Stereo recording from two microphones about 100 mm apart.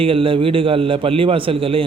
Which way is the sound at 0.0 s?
65° right (ahead or behind).